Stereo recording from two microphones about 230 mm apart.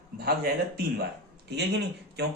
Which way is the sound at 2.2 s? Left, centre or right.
Right.